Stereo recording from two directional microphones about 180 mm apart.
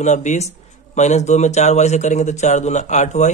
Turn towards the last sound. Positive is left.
turn(degrees=40)  # may be behind; listen again after turning